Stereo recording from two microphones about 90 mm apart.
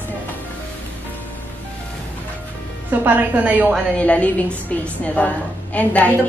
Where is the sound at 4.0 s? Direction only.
15° left (ahead or behind).